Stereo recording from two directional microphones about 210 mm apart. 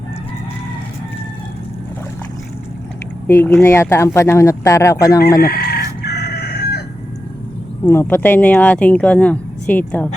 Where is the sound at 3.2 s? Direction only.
10° left (ahead or behind).